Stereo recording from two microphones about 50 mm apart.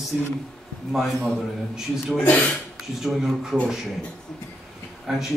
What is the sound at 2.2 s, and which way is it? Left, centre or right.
Speech, left.